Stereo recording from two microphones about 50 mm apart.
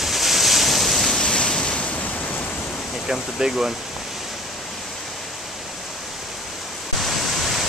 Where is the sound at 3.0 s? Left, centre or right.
Centre.